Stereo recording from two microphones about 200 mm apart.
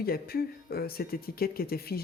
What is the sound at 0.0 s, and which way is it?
Speech, 50° left (ahead or behind).